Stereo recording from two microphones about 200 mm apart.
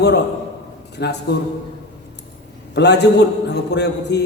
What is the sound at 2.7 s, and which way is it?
A man's voice, 55° left (ahead or behind).